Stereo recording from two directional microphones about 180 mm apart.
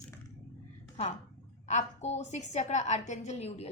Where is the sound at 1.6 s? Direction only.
40° left (ahead or behind).